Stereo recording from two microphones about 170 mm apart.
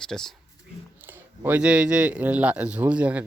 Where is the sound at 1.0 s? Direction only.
10° right (ahead or behind).